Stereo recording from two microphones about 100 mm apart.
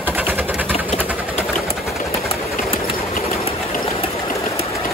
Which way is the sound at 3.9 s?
70° left (ahead or behind).